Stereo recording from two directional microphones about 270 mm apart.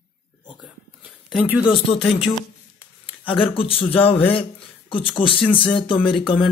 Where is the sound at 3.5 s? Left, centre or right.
Left.